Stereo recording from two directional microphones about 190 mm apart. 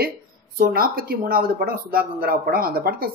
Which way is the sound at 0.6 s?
50° right (ahead or behind).